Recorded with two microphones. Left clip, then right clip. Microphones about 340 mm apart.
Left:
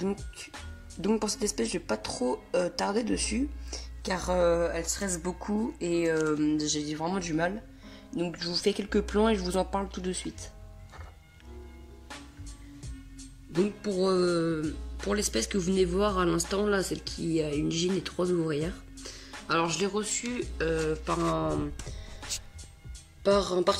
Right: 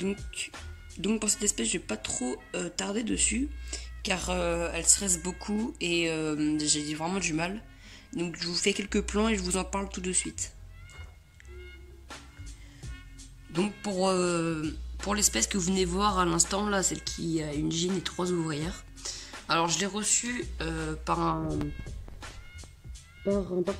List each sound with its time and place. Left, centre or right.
0.0 s speech: centre
5.8 s speech: right
6.0 s speech: centre
13.5 s speech: centre
23.2 s speech: left